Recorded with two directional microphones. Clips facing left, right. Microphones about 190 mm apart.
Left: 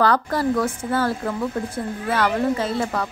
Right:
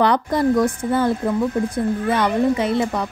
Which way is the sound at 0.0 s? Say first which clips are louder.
Right 2 dB; 20° right (ahead or behind).